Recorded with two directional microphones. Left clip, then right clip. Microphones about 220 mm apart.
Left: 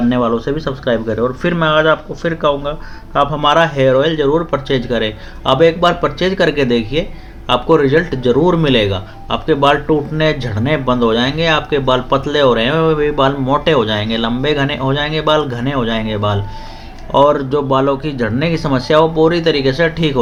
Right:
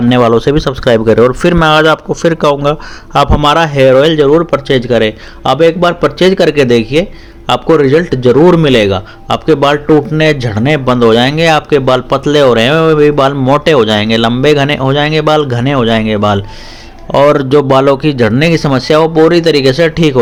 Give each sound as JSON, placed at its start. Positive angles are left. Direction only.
{"t": 0.1, "sound": "a man's voice", "side_deg": -50}